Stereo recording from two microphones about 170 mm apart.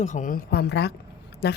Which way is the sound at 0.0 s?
50° left (ahead or behind).